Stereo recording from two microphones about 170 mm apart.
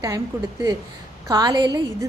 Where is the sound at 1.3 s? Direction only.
25° right (ahead or behind).